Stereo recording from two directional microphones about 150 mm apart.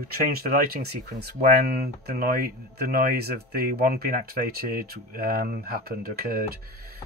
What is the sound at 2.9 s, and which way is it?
Speech, 90° right.